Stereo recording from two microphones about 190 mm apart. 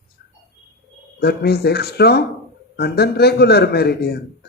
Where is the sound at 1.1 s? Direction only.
60° left (ahead or behind).